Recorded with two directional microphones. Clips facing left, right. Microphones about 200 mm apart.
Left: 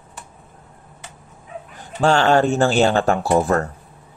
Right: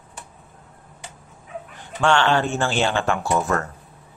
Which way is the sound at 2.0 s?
40° left (ahead or behind).